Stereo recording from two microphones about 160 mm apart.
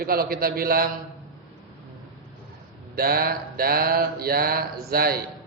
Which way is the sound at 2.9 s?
70° right (ahead or behind).